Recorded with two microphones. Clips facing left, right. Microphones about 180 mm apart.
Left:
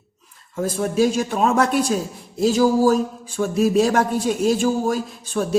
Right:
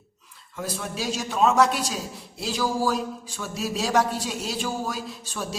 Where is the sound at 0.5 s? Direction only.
45° left (ahead or behind).